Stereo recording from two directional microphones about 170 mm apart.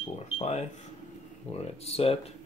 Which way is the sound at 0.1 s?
40° left (ahead or behind).